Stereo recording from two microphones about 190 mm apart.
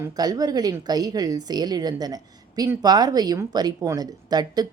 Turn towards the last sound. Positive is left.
turn(degrees=-20)  # may be behind; listen again after turning